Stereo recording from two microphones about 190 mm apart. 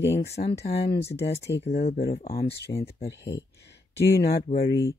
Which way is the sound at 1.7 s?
35° left (ahead or behind).